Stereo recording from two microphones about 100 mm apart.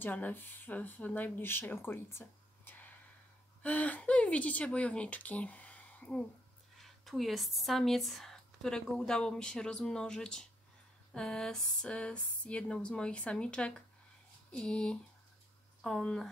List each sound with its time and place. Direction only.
0.0 s speech: 20° left (ahead or behind)
6.8 s speech: centre (ahead or behind)